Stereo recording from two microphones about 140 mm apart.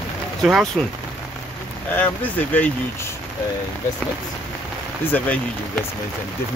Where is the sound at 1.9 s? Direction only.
10° left (ahead or behind).